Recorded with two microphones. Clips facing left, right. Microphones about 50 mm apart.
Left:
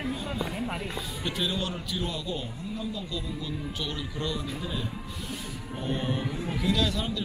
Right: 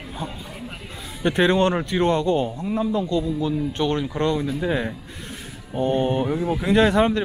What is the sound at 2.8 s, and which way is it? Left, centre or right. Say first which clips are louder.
Speech: right 14 dB; right.